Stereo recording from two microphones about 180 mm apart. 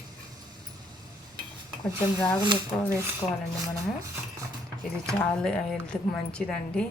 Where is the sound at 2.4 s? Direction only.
15° right (ahead or behind).